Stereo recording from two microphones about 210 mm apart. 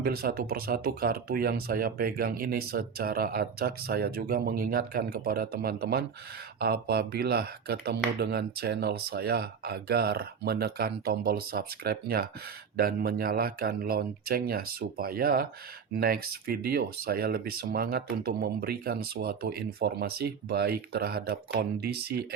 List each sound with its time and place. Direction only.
0.0 s speech: 45° right (ahead or behind)